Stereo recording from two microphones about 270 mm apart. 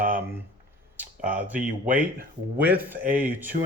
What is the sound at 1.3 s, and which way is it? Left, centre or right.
Speech, centre.